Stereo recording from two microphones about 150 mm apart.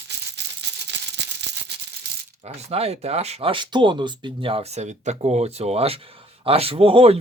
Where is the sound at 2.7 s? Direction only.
45° right (ahead or behind).